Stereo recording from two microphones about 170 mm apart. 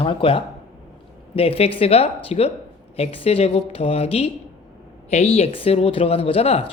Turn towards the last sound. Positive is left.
turn(degrees=35)  # may be behind; listen again after turning